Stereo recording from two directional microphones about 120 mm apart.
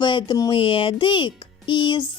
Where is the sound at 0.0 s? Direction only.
40° left (ahead or behind).